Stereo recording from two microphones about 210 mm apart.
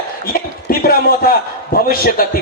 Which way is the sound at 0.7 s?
45° left (ahead or behind).